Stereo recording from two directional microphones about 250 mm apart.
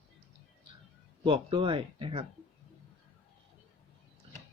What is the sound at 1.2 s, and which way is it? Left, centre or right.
Speech, centre.